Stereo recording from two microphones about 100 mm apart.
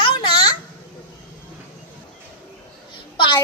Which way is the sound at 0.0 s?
55° left (ahead or behind).